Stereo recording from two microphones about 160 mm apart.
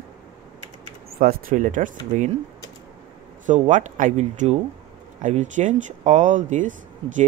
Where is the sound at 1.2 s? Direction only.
55° right (ahead or behind).